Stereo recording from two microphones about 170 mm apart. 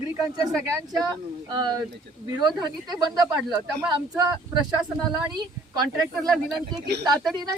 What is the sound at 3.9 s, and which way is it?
Speech, 25° right (ahead or behind).